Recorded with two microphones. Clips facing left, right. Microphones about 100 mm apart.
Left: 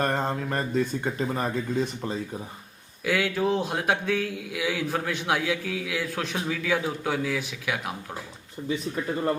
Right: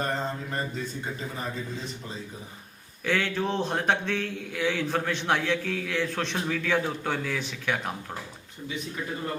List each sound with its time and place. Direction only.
0.0 s mantra: 55° left (ahead or behind)
1.4 s speech: 60° left (ahead or behind)
3.1 s a man's voice: 5° left (ahead or behind)